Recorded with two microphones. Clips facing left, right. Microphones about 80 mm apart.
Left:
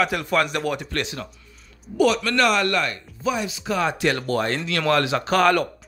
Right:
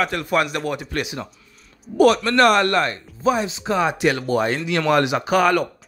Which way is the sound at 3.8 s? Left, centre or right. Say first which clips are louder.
Right 2 dB; centre.